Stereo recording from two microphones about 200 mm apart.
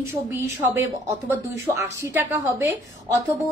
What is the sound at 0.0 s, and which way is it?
A woman's voice, 10° right (ahead or behind).